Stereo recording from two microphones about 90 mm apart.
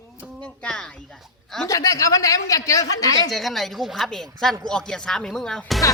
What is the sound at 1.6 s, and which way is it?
Speech, 35° left (ahead or behind).